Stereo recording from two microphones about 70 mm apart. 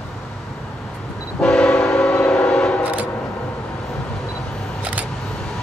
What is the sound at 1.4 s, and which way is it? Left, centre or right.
Train, centre.